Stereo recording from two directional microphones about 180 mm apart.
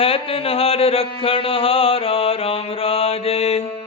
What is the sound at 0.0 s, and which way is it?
Mantra, 30° left (ahead or behind).